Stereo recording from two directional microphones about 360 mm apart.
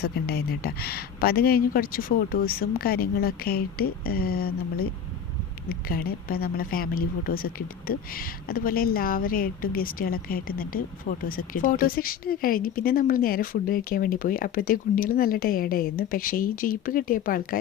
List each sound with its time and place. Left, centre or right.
0.0 s a woman's voice: left